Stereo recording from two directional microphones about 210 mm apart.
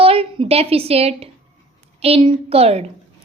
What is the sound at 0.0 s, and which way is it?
A woman's voice, 25° right (ahead or behind).